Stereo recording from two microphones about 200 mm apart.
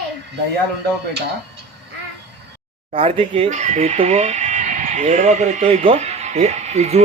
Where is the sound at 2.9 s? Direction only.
25° right (ahead or behind).